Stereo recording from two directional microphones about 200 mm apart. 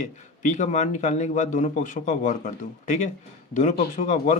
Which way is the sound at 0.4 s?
35° left (ahead or behind).